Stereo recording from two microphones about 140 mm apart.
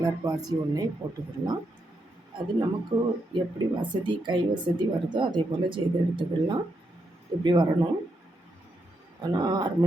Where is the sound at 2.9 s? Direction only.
30° right (ahead or behind).